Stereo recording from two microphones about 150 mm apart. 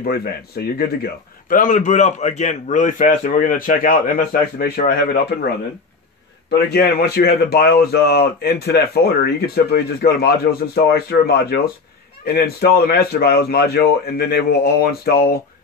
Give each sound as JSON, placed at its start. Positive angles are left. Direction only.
{"t": 0.0, "sound": "a man's voice", "side_deg": 90}
{"t": 6.7, "sound": "a man's voice", "side_deg": 90}